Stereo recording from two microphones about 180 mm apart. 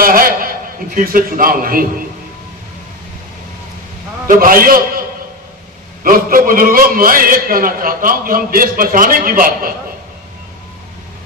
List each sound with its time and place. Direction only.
0.0 s a man's voice: 55° right (ahead or behind)
4.3 s a man's voice: 50° right (ahead or behind)
6.0 s a man's voice: 50° right (ahead or behind)